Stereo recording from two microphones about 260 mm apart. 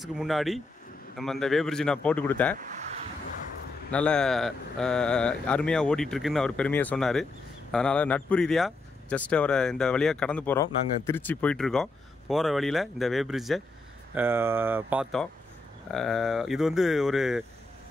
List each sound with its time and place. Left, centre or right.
0.0 s speech: centre
2.6 s a sound: right
3.9 s speech: centre